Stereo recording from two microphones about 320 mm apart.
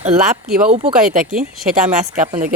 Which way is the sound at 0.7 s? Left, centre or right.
Centre.